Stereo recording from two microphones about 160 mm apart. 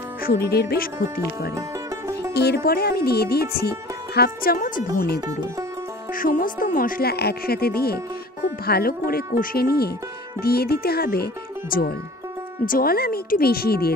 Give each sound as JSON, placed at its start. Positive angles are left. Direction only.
{"t": 0.2, "sound": "music", "side_deg": 75}
{"t": 2.3, "sound": "music", "side_deg": 90}
{"t": 4.9, "sound": "speech", "side_deg": 80}
{"t": 5.2, "sound": "speech", "side_deg": -20}
{"t": 6.1, "sound": "music", "side_deg": 60}
{"t": 11.7, "sound": "speech", "side_deg": 65}
{"t": 12.6, "sound": "music", "side_deg": 65}